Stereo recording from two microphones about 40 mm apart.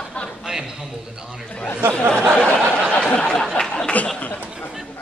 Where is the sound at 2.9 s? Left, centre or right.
Left.